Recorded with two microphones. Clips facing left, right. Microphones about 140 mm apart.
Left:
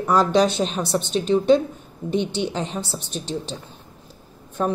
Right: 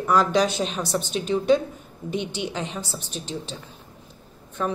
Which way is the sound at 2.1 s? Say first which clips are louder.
Left 5 dB; 30° left (ahead or behind).